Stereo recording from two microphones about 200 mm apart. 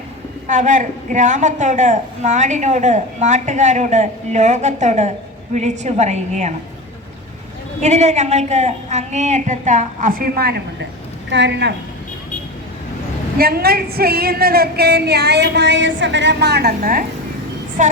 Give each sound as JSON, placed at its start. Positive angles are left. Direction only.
{"t": 0.4, "sound": "a woman's voice", "side_deg": -40}
{"t": 7.8, "sound": "a woman's voice", "side_deg": -35}
{"t": 13.4, "sound": "a woman's voice", "side_deg": -50}